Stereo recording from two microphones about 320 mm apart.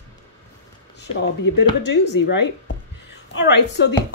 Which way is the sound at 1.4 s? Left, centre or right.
Left.